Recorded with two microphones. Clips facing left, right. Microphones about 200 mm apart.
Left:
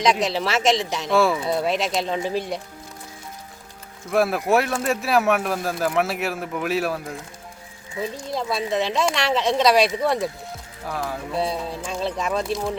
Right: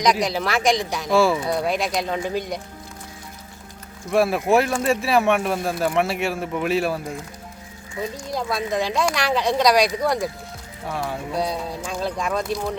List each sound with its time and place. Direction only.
0.0 s speech: 25° left (ahead or behind)
1.0 s speech: centre (ahead or behind)
1.8 s speech: 25° left (ahead or behind)
4.1 s speech: centre (ahead or behind)
8.3 s speech: centre (ahead or behind)